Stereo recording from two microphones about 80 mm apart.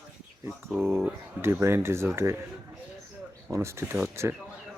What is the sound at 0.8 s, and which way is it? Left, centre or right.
Speech, right.